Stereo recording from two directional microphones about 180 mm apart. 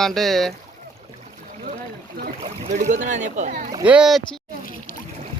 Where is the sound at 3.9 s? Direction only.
5° right (ahead or behind).